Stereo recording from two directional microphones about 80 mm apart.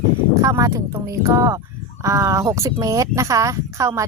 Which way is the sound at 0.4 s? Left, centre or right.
Right.